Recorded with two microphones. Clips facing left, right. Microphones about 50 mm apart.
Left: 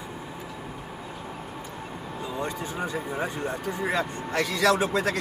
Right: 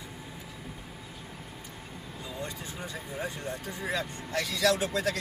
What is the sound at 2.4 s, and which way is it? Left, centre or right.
Speech, left.